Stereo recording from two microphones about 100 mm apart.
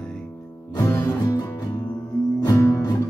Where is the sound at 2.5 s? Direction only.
30° left (ahead or behind).